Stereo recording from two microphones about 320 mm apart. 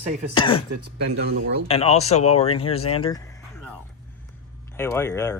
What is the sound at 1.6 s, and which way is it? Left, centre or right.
Speech, centre.